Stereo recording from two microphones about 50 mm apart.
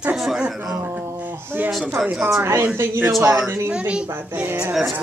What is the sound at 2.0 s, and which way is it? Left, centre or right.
Speech, centre.